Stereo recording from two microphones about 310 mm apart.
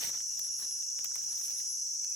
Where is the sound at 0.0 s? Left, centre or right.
Centre.